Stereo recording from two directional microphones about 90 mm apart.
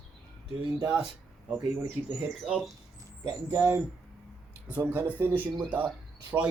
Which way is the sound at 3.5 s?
25° right (ahead or behind).